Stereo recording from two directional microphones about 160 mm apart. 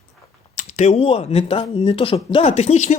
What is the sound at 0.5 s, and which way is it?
Speech, 45° left (ahead or behind).